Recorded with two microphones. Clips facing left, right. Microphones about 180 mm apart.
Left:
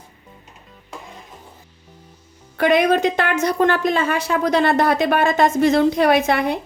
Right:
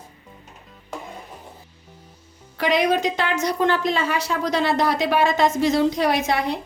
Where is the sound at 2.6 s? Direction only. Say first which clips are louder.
Left 4 dB; 55° left (ahead or behind).